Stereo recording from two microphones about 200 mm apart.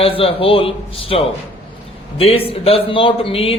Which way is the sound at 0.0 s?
30° left (ahead or behind).